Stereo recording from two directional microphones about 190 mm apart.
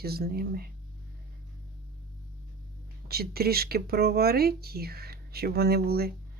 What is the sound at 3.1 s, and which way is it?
Speech, 55° right (ahead or behind).